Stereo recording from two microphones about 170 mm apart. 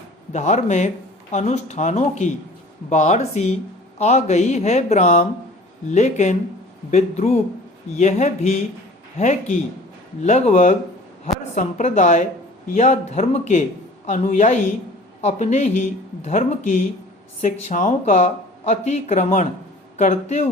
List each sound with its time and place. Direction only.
0.3 s speech: 45° left (ahead or behind)